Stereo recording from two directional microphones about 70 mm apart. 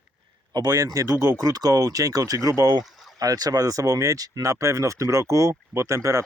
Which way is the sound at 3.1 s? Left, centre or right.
Right.